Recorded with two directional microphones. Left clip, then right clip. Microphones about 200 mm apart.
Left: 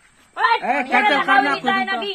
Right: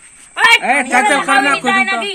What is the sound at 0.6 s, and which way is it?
A man's voice, 10° right (ahead or behind).